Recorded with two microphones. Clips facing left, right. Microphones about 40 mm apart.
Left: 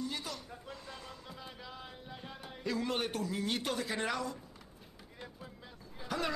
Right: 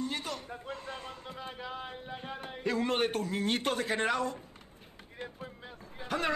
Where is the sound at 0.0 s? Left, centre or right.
Right.